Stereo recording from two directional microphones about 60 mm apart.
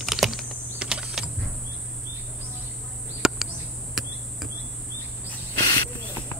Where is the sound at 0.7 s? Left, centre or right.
Centre.